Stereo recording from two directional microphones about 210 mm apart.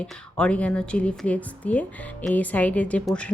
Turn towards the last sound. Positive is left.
turn(degrees=5)  # may be behind; listen again after turning